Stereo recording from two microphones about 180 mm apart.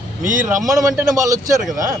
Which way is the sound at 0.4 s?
10° right (ahead or behind).